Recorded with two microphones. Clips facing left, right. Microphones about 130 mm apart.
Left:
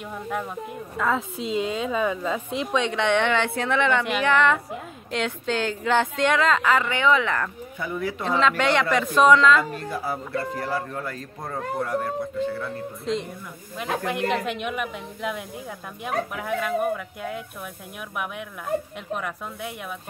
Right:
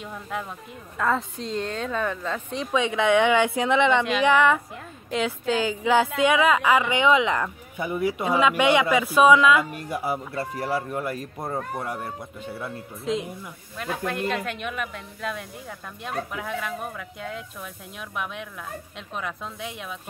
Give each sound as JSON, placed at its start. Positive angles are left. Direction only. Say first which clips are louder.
{"t": 0.9, "sound": "a woman's voice", "louder": "even", "side_deg": 0}
{"t": 13.0, "sound": "a woman's voice", "louder": "right 1 dB", "side_deg": 0}
{"t": 13.7, "sound": "a woman's voice", "louder": "left 2 dB", "side_deg": 15}
{"t": 16.3, "sound": "a woman's voice", "louder": "left 5 dB", "side_deg": 5}